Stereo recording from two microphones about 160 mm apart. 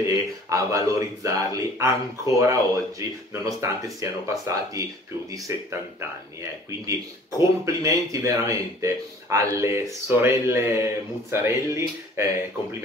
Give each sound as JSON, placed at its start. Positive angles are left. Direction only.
{"t": 0.0, "sound": "speech", "side_deg": -20}
{"t": 7.3, "sound": "speech", "side_deg": -20}